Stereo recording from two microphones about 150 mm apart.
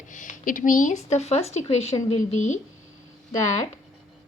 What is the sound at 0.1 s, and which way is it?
Speech, 60° left (ahead or behind).